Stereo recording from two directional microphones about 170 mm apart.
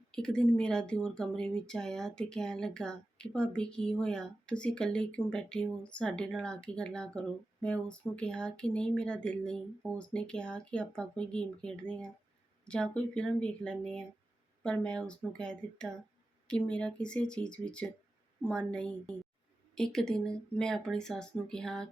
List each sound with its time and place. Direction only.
0.1 s a woman's voice: 5° left (ahead or behind)